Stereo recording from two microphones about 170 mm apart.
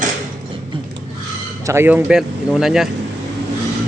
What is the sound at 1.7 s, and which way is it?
Speech, 10° right (ahead or behind).